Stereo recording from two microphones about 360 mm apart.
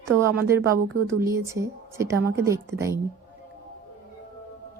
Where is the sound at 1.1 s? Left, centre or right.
Centre.